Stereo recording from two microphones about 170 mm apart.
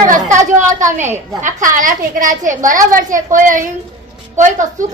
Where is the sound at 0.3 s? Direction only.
45° right (ahead or behind).